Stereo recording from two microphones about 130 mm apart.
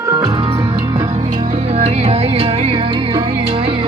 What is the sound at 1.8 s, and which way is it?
Music, 50° right (ahead or behind).